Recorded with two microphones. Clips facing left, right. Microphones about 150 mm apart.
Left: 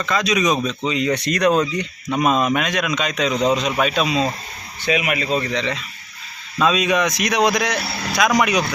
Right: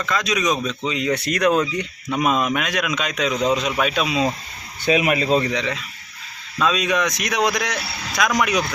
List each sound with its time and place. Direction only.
0.0 s speech: centre (ahead or behind)
4.9 s speech: 35° right (ahead or behind)
5.4 s speech: 10° right (ahead or behind)
6.6 s speech: 5° left (ahead or behind)